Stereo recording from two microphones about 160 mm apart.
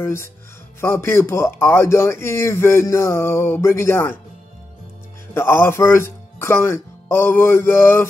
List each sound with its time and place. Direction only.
0.0 s a man's voice: 15° left (ahead or behind)
5.3 s speech: 15° left (ahead or behind)